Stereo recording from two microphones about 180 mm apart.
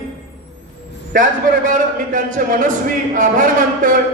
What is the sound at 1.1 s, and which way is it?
A man's voice, 50° right (ahead or behind).